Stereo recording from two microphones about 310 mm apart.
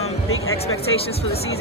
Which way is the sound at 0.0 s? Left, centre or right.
Left.